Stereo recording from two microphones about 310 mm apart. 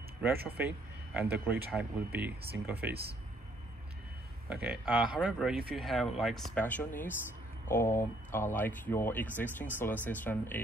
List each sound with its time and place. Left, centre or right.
0.2 s speech: centre
4.5 s speech: centre